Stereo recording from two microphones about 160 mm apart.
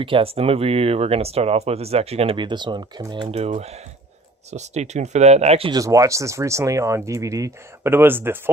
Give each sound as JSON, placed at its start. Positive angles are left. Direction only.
{"t": 0.0, "sound": "speech", "side_deg": -35}
{"t": 3.4, "sound": "speech", "side_deg": -40}
{"t": 5.7, "sound": "speech", "side_deg": -20}